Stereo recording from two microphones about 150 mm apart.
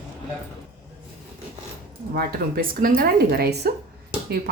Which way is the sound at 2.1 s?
90° right.